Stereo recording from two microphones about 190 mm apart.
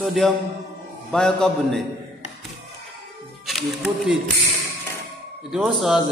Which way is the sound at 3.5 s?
Centre (ahead or behind).